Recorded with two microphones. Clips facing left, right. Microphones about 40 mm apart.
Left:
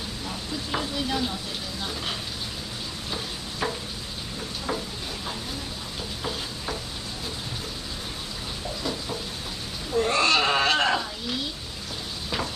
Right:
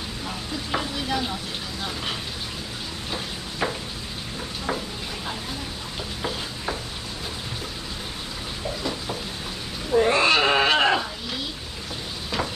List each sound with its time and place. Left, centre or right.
0.7 s stir: centre
3.1 s stir: centre
6.2 s stir: centre
9.8 s a sound: right